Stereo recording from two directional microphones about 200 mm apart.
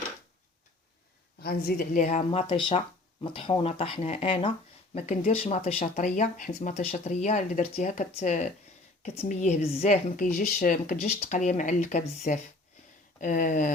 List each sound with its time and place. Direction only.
1.4 s speech: 50° left (ahead or behind)